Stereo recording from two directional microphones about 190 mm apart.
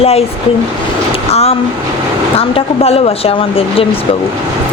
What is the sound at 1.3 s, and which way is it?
Speech, 30° left (ahead or behind).